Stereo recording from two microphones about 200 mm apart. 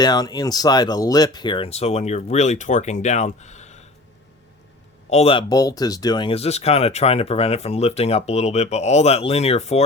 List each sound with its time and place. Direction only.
0.0 s speech: 20° left (ahead or behind); by 3.8 s 35° left (ahead or behind)
5.0 s speech: 30° left (ahead or behind)